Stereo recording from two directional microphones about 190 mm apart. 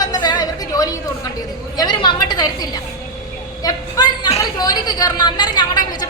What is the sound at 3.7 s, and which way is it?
A woman's voice, 20° left (ahead or behind).